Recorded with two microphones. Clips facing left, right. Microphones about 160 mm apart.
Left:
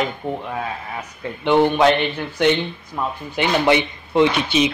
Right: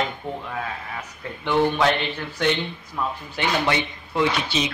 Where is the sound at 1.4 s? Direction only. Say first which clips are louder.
Left 5 dB; 20° left (ahead or behind).